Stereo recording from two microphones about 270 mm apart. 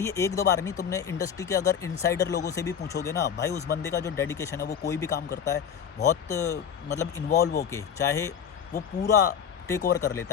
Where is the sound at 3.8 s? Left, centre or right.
Centre.